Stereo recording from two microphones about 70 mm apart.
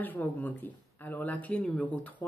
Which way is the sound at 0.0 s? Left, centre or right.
Left.